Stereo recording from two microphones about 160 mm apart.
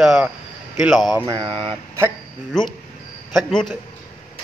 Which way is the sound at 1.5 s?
10° left (ahead or behind).